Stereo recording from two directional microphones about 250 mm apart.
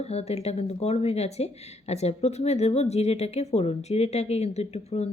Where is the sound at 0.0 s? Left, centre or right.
Left.